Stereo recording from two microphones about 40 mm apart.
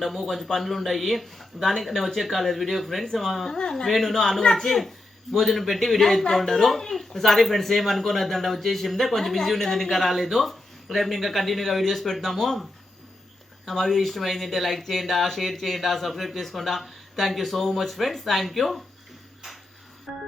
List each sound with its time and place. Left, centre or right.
0.0 s speech: centre
3.5 s speech: centre
3.8 s speech: centre
13.7 s speech: centre